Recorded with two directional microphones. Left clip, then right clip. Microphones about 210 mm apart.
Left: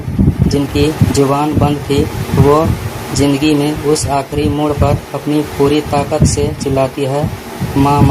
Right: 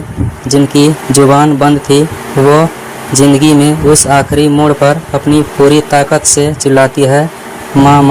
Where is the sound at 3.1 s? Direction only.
45° right (ahead or behind).